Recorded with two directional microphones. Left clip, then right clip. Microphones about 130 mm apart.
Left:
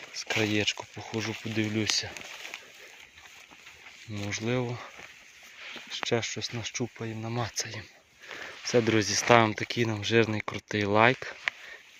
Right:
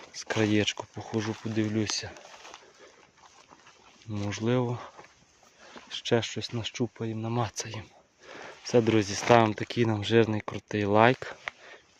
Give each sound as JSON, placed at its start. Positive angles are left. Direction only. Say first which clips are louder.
{"t": 0.1, "sound": "speech", "louder": "right 1 dB", "side_deg": -50}
{"t": 1.5, "sound": "speech", "louder": "left 1 dB", "side_deg": -25}
{"t": 4.3, "sound": "speech", "louder": "right 2 dB", "side_deg": -55}
{"t": 5.9, "sound": "speech", "louder": "right 2 dB", "side_deg": -60}
{"t": 8.4, "sound": "a sound", "louder": "right 1 dB", "side_deg": -40}
{"t": 8.9, "sound": "speech", "louder": "left 1 dB", "side_deg": -25}
{"t": 9.6, "sound": "speech", "louder": "right 1 dB", "side_deg": -35}
{"t": 10.2, "sound": "speech", "louder": "right 1 dB", "side_deg": -20}
{"t": 11.0, "sound": "speech", "louder": "even", "side_deg": -40}